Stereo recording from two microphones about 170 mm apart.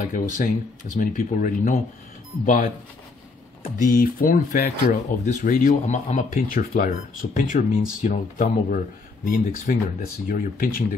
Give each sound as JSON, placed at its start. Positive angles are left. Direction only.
{"t": 0.0, "sound": "speech", "side_deg": 50}
{"t": 3.7, "sound": "speech", "side_deg": 55}